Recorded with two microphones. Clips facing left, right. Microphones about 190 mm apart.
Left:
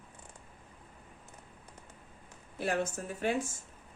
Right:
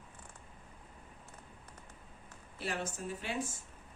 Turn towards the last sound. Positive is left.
turn(degrees=50)  # may be behind; listen again after turning